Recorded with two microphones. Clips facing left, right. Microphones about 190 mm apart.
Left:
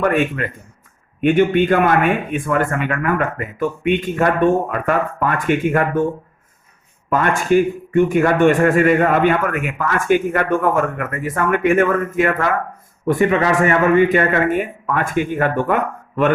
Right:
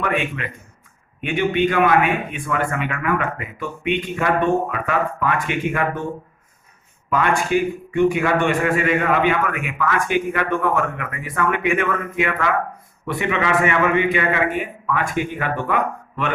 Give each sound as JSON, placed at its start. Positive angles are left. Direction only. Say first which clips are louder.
{"t": 0.0, "sound": "a man's voice", "louder": "left 6 dB", "side_deg": 45}
{"t": 7.1, "sound": "a man's voice", "louder": "left 3 dB", "side_deg": 45}